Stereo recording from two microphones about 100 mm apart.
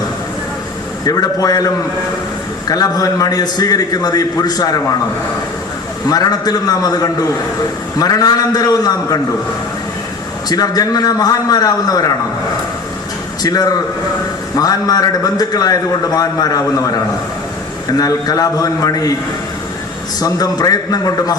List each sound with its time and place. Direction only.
1.0 s a man's voice: 40° left (ahead or behind)
6.1 s a man's voice: 40° left (ahead or behind)
10.5 s a man's voice: 40° left (ahead or behind)
13.4 s a man's voice: 40° left (ahead or behind)
20.1 s a man's voice: 40° left (ahead or behind)